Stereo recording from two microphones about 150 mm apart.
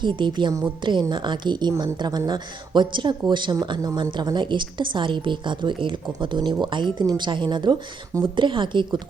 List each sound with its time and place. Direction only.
0.0 s speech: 30° right (ahead or behind)